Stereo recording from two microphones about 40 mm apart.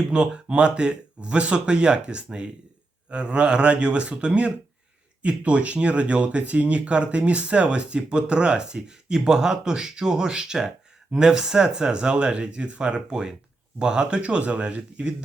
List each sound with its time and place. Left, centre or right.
0.1 s speech: right